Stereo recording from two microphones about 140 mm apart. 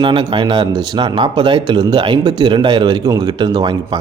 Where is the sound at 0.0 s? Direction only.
35° right (ahead or behind).